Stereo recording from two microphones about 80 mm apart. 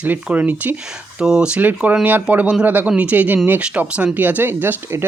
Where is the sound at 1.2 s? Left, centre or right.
Centre.